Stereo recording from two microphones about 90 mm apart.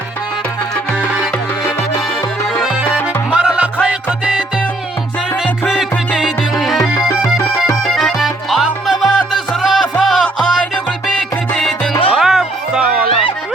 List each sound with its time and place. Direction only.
2.9 s music: 10° right (ahead or behind)
5.6 s music: 15° left (ahead or behind)
6.1 s music: centre (ahead or behind)
7.9 s music: centre (ahead or behind)
12.1 s music: 5° right (ahead or behind)
13.1 s music: 90° left